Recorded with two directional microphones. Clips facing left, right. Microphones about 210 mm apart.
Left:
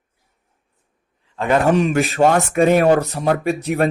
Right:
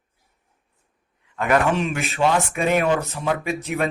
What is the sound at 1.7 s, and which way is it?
Speech, 45° left (ahead or behind).